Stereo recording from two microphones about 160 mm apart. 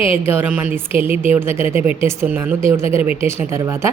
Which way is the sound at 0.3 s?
10° right (ahead or behind).